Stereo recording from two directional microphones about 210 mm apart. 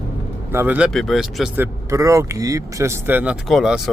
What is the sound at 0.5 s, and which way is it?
Speech, 10° right (ahead or behind).